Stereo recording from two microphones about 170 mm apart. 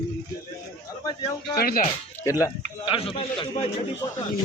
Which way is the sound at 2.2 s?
20° left (ahead or behind).